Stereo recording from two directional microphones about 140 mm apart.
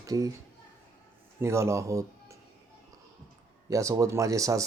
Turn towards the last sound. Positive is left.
turn(degrees=-25)  # may be behind; listen again after turning